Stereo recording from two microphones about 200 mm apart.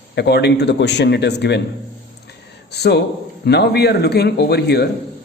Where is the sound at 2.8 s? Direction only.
55° left (ahead or behind).